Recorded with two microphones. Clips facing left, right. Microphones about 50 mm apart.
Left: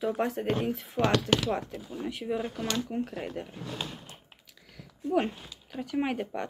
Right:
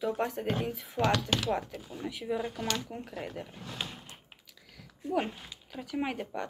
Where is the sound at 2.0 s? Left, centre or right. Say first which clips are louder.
Left 1 dB; centre.